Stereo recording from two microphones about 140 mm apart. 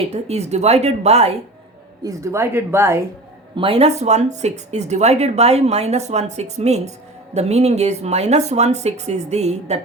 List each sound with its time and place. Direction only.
0.1 s speech: 50° right (ahead or behind)
2.0 s a woman's voice: 20° right (ahead or behind)
3.5 s speech: 40° right (ahead or behind)